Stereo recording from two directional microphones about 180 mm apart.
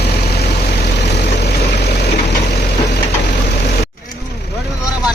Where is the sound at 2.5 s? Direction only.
65° left (ahead or behind).